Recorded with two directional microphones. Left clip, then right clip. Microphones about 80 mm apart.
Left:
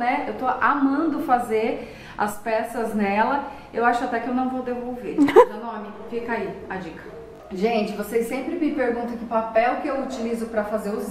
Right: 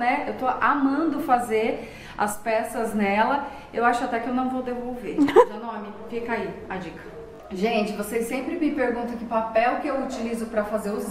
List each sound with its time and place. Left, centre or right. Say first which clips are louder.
0.0 s a woman's voice: even; centre
5.2 s a woman's voice: left 3 dB; centre
6.2 s a woman's voice: even; centre